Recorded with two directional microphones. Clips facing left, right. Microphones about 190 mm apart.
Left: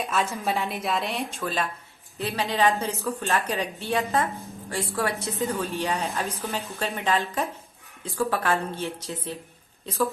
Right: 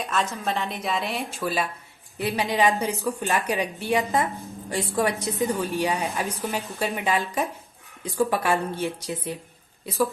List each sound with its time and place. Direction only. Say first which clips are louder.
0.0 s a woman's voice: even; 5° left (ahead or behind); by 10.1 s 15° right (ahead or behind)